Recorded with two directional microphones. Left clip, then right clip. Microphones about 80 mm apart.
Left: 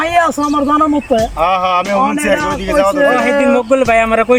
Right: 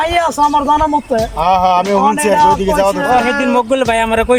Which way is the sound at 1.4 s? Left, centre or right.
Right.